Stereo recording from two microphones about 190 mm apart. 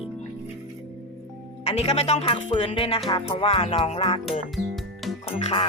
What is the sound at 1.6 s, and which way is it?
Speech, 35° left (ahead or behind).